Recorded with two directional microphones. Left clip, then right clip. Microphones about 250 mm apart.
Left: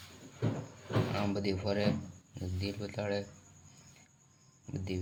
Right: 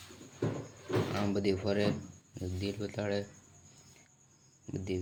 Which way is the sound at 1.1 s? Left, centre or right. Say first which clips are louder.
Right 2 dB; centre.